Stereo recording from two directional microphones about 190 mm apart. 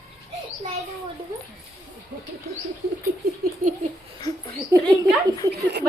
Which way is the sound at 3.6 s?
45° right (ahead or behind).